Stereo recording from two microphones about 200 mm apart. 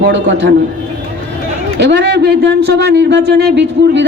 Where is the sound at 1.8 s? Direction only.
60° right (ahead or behind).